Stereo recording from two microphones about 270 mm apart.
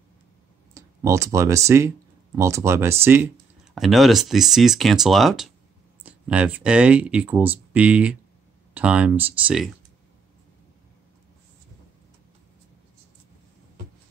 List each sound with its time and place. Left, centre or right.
0.7 s speech: centre